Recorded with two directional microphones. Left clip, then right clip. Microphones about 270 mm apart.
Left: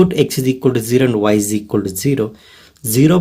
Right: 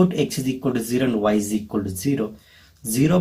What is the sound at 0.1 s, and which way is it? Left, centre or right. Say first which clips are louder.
Speech: left 8 dB; left.